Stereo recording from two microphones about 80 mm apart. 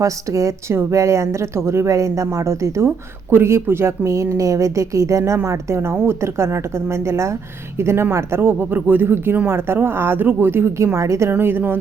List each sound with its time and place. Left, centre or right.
0.0 s a woman's voice: right
11.3 s a woman's voice: right